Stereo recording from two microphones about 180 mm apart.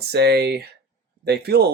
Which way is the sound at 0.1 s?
65° right (ahead or behind).